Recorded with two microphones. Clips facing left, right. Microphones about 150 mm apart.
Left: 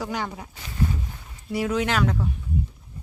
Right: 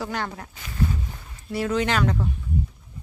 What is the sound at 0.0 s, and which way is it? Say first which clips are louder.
Speech: even; 10° left (ahead or behind).